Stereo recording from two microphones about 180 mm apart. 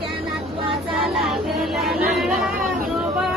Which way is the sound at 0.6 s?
30° right (ahead or behind).